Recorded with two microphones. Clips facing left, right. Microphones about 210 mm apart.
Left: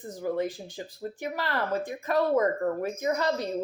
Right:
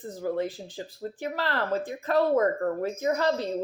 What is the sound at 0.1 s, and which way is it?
Speech, 15° left (ahead or behind).